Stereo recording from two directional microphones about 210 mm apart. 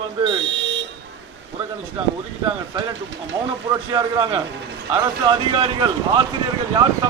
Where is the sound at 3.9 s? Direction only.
20° right (ahead or behind).